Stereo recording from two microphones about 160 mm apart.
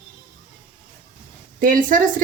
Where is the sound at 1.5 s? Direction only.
60° right (ahead or behind).